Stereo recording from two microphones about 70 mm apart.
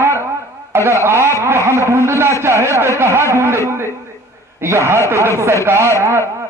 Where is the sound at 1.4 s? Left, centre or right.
Right.